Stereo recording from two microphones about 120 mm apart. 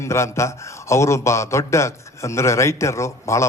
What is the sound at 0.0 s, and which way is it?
A man's voice, 25° left (ahead or behind).